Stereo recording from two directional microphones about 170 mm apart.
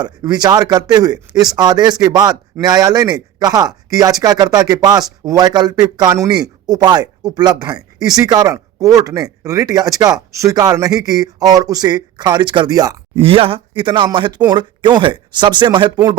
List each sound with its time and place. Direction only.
0.0 s speech: 25° right (ahead or behind)
13.1 s speech: 35° right (ahead or behind)